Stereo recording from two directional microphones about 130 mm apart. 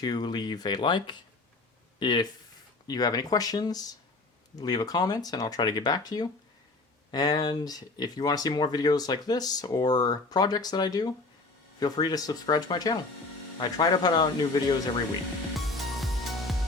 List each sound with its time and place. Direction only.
0.0 s speech: 35° left (ahead or behind)
15.5 s music: centre (ahead or behind)